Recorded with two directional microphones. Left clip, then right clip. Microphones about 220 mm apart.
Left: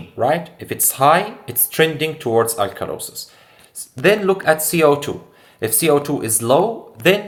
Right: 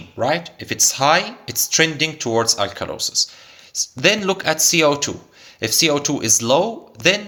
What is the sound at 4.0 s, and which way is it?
A man's voice, 30° right (ahead or behind).